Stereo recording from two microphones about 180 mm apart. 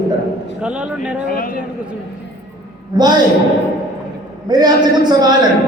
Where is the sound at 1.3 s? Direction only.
50° left (ahead or behind).